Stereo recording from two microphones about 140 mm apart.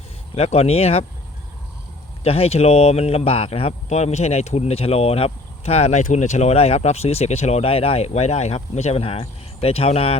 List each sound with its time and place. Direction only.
0.3 s speech: 50° left (ahead or behind)
2.2 s speech: 45° left (ahead or behind)